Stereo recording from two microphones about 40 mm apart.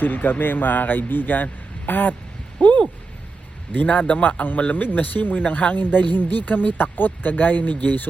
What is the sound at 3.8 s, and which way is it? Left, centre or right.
A man's voice, left.